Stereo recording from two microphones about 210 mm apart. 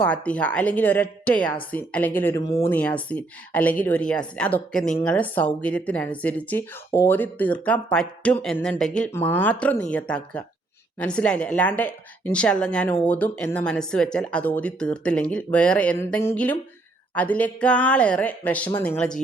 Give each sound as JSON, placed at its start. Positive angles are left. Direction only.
{"t": 0.0, "sound": "a woman's voice", "side_deg": 5}